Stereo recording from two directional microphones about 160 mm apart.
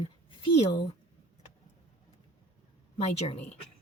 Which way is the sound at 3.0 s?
40° left (ahead or behind).